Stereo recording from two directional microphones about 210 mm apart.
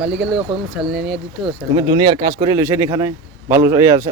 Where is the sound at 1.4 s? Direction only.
20° right (ahead or behind).